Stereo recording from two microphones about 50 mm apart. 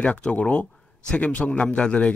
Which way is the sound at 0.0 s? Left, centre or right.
Left.